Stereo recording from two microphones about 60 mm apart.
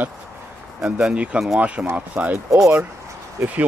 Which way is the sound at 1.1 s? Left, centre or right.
Right.